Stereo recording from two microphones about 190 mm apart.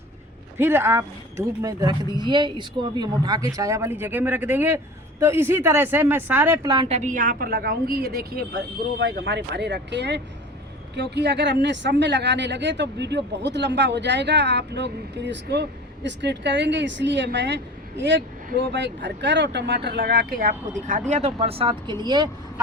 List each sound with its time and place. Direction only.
0.6 s a woman's voice: 10° right (ahead or behind)
6.8 s a woman's voice: 35° right (ahead or behind)